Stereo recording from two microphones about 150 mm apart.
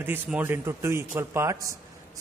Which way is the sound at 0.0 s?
15° right (ahead or behind).